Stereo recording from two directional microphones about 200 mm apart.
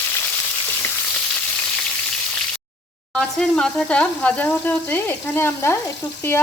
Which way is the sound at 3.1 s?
5° left (ahead or behind).